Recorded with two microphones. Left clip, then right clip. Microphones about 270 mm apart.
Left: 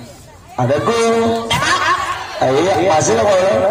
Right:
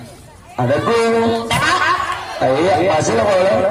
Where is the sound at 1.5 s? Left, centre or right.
Left.